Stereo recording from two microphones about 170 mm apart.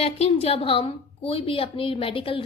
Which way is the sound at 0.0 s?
35° left (ahead or behind).